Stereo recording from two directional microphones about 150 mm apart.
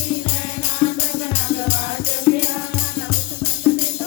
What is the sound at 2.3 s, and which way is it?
Music, 20° left (ahead or behind).